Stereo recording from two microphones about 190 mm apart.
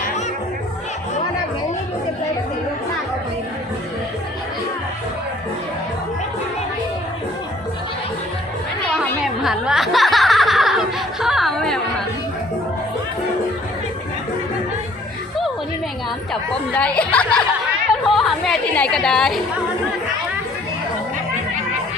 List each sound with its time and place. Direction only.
9.2 s chuckle: centre (ahead or behind)
16.3 s speech: 5° left (ahead or behind)